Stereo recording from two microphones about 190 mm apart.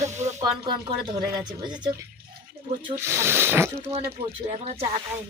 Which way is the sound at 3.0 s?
15° right (ahead or behind).